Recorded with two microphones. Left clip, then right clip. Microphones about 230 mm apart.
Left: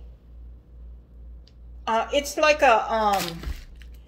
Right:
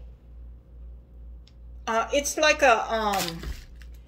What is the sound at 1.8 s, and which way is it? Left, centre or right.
Speech, centre.